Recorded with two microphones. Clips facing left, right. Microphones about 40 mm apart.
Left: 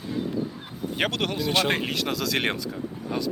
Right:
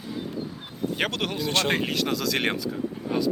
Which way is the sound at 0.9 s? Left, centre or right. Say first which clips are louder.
Left 3 dB; centre.